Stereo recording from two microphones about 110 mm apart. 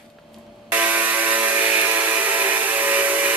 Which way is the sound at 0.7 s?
15° right (ahead or behind).